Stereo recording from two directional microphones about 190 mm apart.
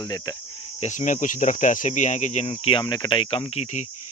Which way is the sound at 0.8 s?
40° left (ahead or behind).